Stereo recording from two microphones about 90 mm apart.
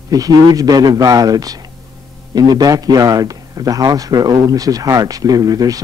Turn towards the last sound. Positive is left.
turn(degrees=-45)  # may be behind; listen again after turning